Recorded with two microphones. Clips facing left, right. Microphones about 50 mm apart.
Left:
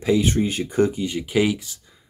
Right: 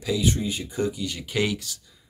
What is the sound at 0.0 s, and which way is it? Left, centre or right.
Speech, left.